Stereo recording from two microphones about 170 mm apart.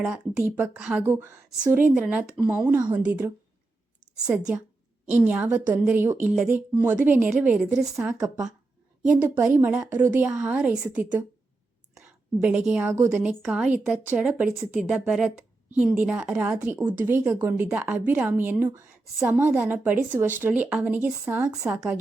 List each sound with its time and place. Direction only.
0.0 s a woman's voice: centre (ahead or behind)
7.8 s a woman's voice: 20° right (ahead or behind)
12.4 s a woman's voice: 10° right (ahead or behind)
13.4 s a woman's voice: 5° right (ahead or behind)